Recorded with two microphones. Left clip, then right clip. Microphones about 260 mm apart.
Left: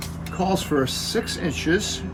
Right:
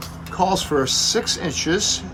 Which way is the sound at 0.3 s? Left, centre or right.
Centre.